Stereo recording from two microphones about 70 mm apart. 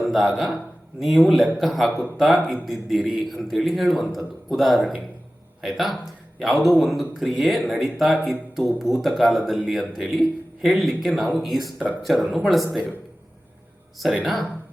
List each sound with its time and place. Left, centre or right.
0.0 s a man's voice: centre